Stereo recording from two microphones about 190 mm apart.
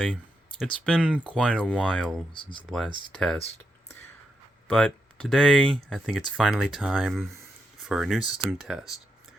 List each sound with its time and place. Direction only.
0.6 s speech: 5° left (ahead or behind)
1.0 s speech: 5° right (ahead or behind)
1.3 s speech: 5° left (ahead or behind)
2.3 s speech: 25° left (ahead or behind)
2.6 s speech: centre (ahead or behind)
4.7 s speech: 5° left (ahead or behind)